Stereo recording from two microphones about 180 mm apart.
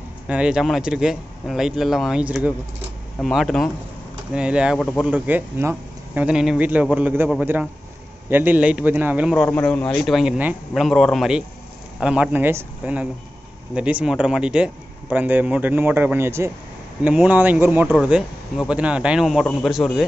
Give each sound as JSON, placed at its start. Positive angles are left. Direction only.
{"t": 0.3, "sound": "speech", "side_deg": -5}
{"t": 9.4, "sound": "speech", "side_deg": 10}